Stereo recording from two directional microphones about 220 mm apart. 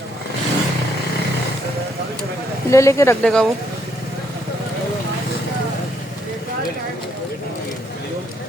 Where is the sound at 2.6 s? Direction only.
15° left (ahead or behind).